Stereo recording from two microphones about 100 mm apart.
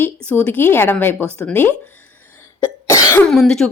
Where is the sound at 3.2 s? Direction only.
5° left (ahead or behind).